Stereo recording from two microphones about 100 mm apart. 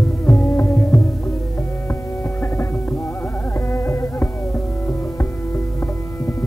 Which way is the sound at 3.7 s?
25° left (ahead or behind).